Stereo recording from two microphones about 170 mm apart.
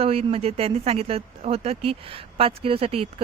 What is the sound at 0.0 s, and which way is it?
Speech, 35° right (ahead or behind).